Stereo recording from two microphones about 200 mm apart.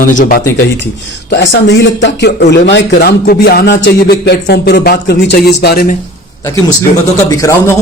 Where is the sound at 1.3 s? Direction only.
55° left (ahead or behind).